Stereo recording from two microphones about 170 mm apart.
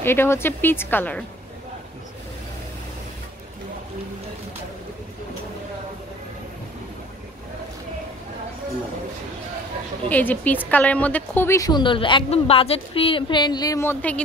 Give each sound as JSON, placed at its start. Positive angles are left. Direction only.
{"t": 0.0, "sound": "speech", "side_deg": 15}
{"t": 10.0, "sound": "a woman's voice", "side_deg": 10}